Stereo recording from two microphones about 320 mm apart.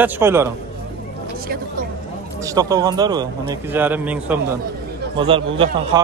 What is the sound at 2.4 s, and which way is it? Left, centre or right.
A man's voice, centre.